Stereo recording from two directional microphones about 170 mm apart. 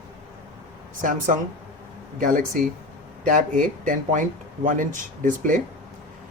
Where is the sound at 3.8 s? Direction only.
50° right (ahead or behind).